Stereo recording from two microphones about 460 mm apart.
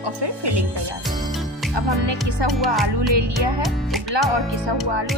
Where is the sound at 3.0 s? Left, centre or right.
Right.